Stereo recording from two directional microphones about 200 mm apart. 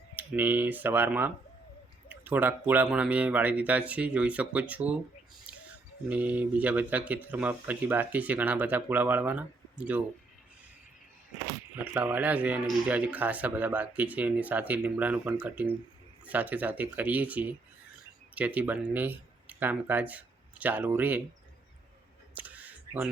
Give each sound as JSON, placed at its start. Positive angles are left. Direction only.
{"t": 0.2, "sound": "speech", "side_deg": -10}
{"t": 6.1, "sound": "speech", "side_deg": -5}
{"t": 11.8, "sound": "speech", "side_deg": -10}
{"t": 22.4, "sound": "a sound", "side_deg": -10}